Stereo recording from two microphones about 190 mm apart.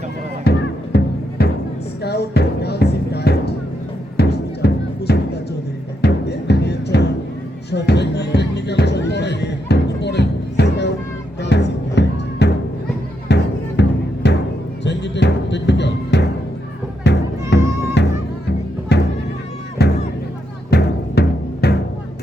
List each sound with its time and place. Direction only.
0.5 s music: 55° left (ahead or behind)